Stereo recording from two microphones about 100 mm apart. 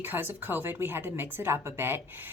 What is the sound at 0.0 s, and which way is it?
A woman's voice, 20° right (ahead or behind).